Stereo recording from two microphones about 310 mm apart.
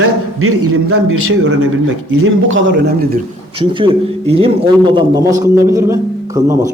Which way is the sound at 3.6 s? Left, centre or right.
Centre.